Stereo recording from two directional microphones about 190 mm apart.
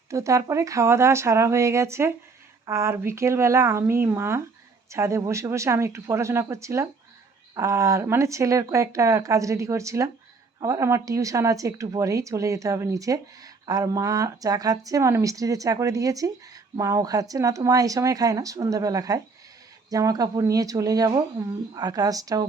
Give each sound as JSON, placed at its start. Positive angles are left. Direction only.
{"t": 0.1, "sound": "a woman's voice", "side_deg": -15}